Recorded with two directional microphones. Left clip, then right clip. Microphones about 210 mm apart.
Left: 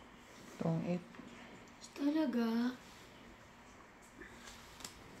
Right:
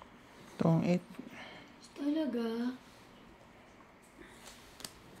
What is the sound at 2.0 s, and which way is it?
Speech, 25° left (ahead or behind).